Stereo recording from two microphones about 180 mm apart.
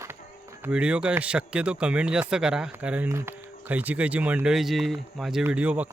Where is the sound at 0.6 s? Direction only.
5° right (ahead or behind).